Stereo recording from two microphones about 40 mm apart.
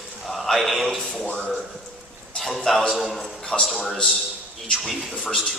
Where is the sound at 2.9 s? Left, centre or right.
Centre.